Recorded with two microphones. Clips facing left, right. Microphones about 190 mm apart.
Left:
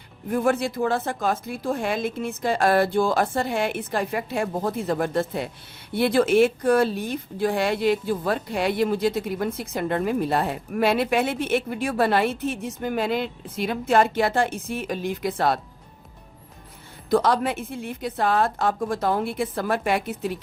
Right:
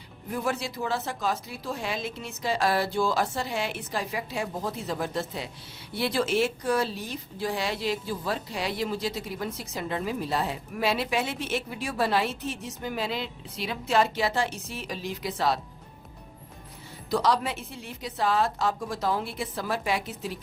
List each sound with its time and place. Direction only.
0.3 s a woman's voice: 50° left (ahead or behind)
17.1 s a woman's voice: 50° left (ahead or behind)